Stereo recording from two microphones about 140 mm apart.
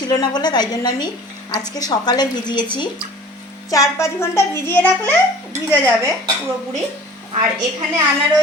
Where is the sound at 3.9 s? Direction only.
20° left (ahead or behind).